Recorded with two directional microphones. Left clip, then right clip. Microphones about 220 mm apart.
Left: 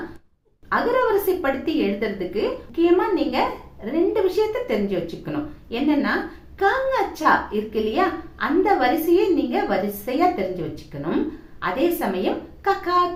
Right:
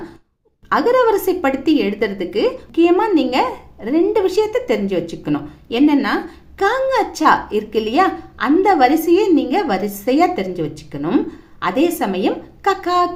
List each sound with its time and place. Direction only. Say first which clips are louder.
0.7 s a woman's voice: right 6 dB; 50° right (ahead or behind)